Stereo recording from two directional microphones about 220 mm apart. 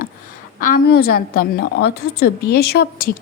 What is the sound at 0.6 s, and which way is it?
A woman's voice, 45° left (ahead or behind).